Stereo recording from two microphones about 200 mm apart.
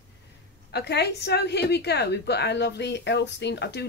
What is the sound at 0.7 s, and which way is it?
A woman's voice, 55° left (ahead or behind).